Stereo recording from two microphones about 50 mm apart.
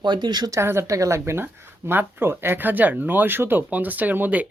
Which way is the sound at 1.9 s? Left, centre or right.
Right.